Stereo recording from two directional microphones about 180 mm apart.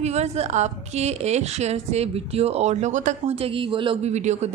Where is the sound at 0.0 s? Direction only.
35° right (ahead or behind).